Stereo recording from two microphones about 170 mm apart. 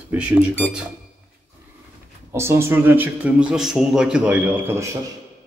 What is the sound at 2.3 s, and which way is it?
Speech, 15° right (ahead or behind).